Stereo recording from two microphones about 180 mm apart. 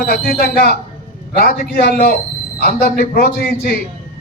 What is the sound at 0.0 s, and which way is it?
A man's voice, 55° left (ahead or behind).